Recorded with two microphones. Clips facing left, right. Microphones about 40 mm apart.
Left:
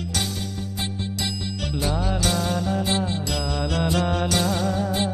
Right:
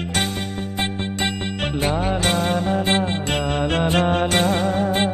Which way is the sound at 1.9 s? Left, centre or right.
Right.